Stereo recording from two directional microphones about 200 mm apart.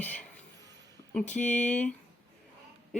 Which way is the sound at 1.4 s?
35° left (ahead or behind).